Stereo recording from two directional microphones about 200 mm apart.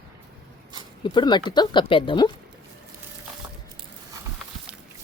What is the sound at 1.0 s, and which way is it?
Speech, 20° left (ahead or behind).